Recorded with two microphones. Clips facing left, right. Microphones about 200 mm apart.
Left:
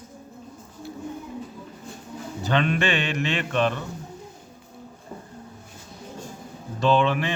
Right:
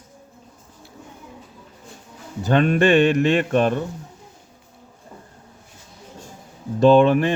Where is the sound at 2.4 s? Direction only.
45° right (ahead or behind).